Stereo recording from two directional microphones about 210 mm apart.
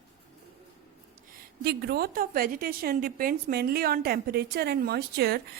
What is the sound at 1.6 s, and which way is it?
A woman's voice, 50° right (ahead or behind).